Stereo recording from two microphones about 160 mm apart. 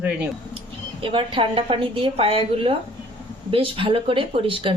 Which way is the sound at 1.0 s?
35° right (ahead or behind).